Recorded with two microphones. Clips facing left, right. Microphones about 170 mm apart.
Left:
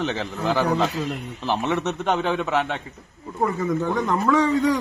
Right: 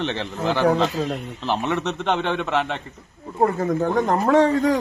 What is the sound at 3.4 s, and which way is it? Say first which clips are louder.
Speech: right 3 dB; 50° right (ahead or behind).